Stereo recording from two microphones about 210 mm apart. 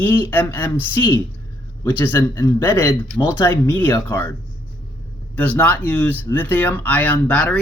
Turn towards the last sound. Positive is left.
turn(degrees=5)  # may be behind; listen again after turning